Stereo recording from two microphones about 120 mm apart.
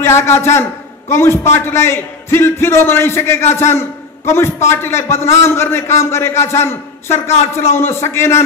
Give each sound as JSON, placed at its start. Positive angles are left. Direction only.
{"t": 0.0, "sound": "a man's voice", "side_deg": 20}